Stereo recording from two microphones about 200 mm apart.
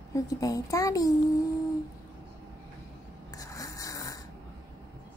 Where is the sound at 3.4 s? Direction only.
15° left (ahead or behind).